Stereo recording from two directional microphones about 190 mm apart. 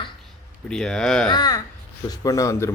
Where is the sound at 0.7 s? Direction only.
5° left (ahead or behind).